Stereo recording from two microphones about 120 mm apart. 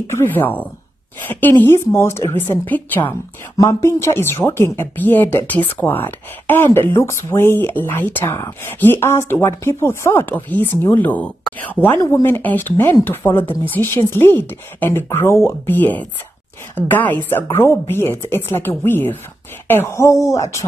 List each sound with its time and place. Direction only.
0.1 s speech: 20° left (ahead or behind)